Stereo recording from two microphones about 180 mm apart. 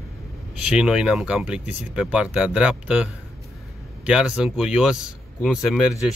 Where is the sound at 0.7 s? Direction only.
5° right (ahead or behind).